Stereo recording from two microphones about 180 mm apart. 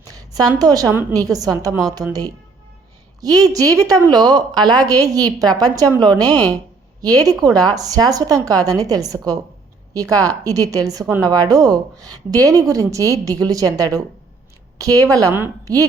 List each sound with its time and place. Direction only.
0.0 s a sound: 20° right (ahead or behind)
0.6 s a woman's voice: 20° right (ahead or behind)
3.2 s a woman's voice: 20° right (ahead or behind)